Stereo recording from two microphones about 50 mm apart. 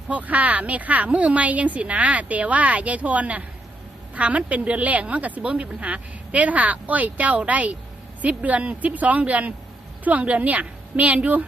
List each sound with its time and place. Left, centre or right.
0.1 s a woman's voice: right